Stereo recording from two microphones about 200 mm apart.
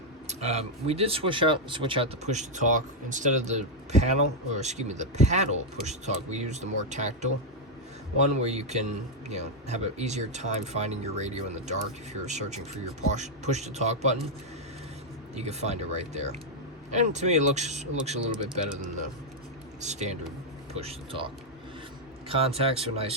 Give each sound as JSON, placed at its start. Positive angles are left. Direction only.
{"t": 0.3, "sound": "speech", "side_deg": -35}
{"t": 15.4, "sound": "speech", "side_deg": -35}
{"t": 19.8, "sound": "speech", "side_deg": -35}
{"t": 22.3, "sound": "speech", "side_deg": -30}